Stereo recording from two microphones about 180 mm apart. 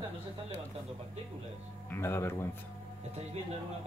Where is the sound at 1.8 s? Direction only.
15° left (ahead or behind).